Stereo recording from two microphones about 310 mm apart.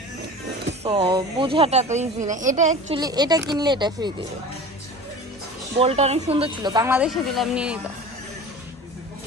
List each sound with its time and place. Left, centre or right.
0.7 s speech: centre
3.0 s speech: centre
5.7 s speech: centre